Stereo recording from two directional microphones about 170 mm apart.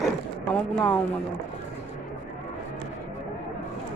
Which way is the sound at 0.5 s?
5° left (ahead or behind).